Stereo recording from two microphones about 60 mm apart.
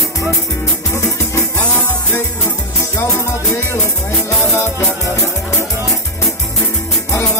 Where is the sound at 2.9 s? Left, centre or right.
Left.